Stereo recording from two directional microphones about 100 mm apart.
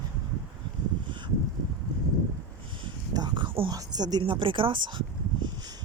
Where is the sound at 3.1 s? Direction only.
45° right (ahead or behind).